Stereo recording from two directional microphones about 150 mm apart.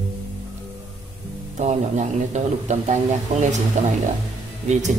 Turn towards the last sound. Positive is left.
turn(degrees=-50)  # may be behind; listen again after turning